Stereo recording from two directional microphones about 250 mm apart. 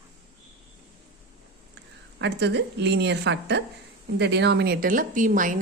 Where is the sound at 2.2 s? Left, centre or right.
Right.